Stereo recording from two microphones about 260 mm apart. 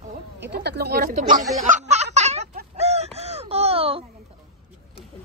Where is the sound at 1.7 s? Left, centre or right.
Right.